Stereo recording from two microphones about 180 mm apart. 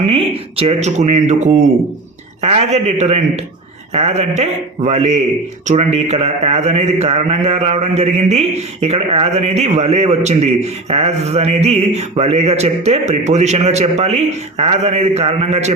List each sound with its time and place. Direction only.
0.0 s a man's voice: 35° right (ahead or behind)